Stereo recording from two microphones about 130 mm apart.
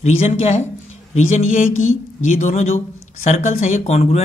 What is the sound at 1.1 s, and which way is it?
A woman's voice, 70° left (ahead or behind).